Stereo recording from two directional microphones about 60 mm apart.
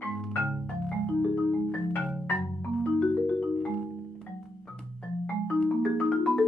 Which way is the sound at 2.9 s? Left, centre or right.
Left.